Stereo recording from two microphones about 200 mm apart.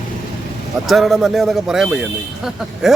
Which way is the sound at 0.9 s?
Centre (ahead or behind).